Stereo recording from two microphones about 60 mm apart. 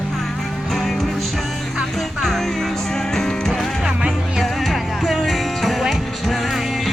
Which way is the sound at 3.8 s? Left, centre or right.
Centre.